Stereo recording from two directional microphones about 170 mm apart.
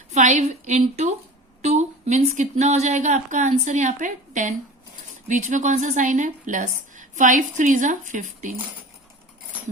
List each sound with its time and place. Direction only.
0.1 s a woman's voice: 45° right (ahead or behind)